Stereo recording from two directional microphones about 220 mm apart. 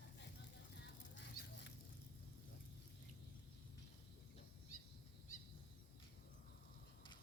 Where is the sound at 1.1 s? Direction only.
50° left (ahead or behind).